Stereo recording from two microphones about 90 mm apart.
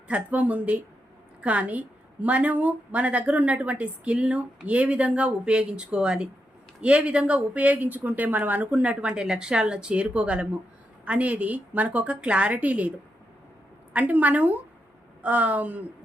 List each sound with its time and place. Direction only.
0.1 s a woman's voice: 15° right (ahead or behind)
13.9 s a woman's voice: 20° right (ahead or behind)